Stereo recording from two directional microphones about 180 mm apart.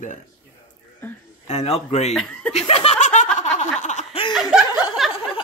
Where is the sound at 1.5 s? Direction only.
35° left (ahead or behind).